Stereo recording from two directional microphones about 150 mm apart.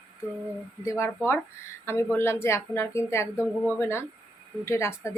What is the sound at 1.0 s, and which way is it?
A woman's voice, 15° left (ahead or behind).